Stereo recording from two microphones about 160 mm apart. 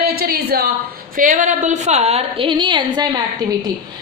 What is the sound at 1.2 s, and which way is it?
A woman's voice, 55° right (ahead or behind).